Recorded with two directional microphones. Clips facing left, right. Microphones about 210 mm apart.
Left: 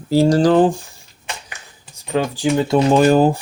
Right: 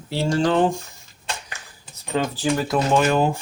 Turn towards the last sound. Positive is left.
turn(degrees=35)  # may be behind; listen again after turning